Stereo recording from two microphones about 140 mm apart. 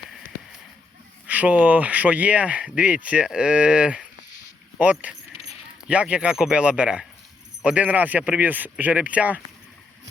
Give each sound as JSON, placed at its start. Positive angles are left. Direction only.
{"t": 1.3, "sound": "speech", "side_deg": -10}
{"t": 5.3, "sound": "keys jangling", "side_deg": 45}
{"t": 5.9, "sound": "speech", "side_deg": -10}